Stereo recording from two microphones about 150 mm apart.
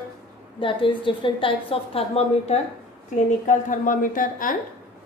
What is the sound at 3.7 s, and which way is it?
Speech, 65° left (ahead or behind).